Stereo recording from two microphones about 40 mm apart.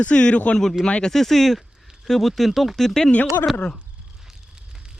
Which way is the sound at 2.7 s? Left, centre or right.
Centre.